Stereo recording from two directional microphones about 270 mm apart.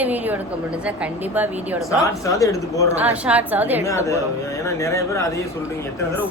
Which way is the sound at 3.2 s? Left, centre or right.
Centre.